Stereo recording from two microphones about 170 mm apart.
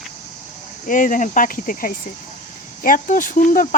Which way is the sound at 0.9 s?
50° left (ahead or behind).